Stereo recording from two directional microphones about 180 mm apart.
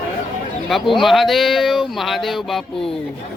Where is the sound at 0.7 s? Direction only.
Centre (ahead or behind).